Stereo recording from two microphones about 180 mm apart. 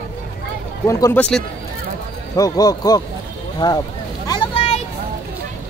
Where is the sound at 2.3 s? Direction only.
20° left (ahead or behind).